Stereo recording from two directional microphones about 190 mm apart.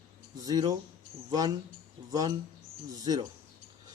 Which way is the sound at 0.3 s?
20° right (ahead or behind).